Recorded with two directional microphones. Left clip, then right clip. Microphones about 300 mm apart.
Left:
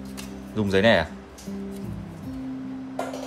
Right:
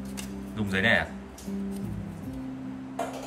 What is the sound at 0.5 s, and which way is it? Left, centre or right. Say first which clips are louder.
Speech: left 5 dB; centre.